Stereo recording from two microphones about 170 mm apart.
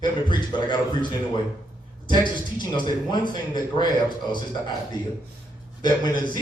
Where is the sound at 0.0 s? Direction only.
25° left (ahead or behind).